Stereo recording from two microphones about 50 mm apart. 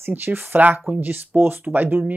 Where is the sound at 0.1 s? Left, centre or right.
Right.